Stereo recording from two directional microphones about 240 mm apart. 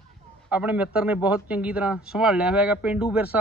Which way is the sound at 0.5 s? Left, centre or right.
Centre.